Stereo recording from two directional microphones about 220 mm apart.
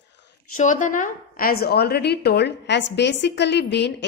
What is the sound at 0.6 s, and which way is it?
A woman's voice, 35° left (ahead or behind).